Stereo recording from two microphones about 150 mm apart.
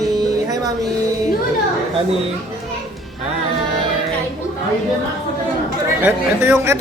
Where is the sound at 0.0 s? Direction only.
25° right (ahead or behind).